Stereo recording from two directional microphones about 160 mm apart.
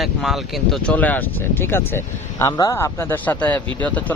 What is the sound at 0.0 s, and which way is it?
Speech, centre (ahead or behind).